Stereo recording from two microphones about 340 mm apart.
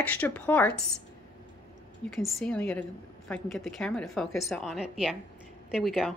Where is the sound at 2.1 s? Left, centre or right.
Centre.